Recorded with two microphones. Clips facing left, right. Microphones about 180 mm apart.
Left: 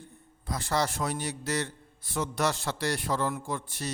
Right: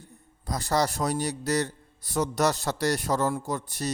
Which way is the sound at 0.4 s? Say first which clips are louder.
Right 3 dB; 40° right (ahead or behind).